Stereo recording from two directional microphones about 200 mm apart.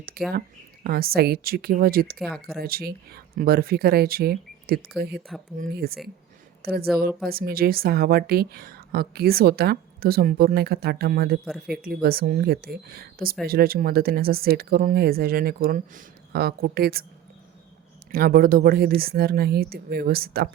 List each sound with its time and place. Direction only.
0.2 s a woman's voice: 50° right (ahead or behind)
2.1 s speech: centre (ahead or behind)
2.6 s a woman's voice: 50° right (ahead or behind)
11.4 s speech: centre (ahead or behind)
11.8 s a woman's voice: 50° right (ahead or behind)
18.1 s a woman's voice: 50° right (ahead or behind)